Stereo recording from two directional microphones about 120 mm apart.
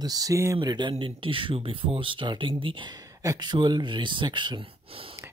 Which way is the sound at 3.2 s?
35° right (ahead or behind).